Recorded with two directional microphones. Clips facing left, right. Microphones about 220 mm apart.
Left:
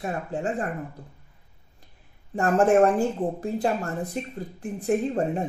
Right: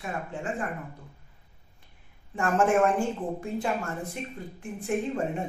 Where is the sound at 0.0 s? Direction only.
35° left (ahead or behind).